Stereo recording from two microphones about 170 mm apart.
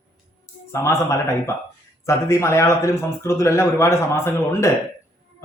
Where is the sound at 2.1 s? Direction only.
15° left (ahead or behind).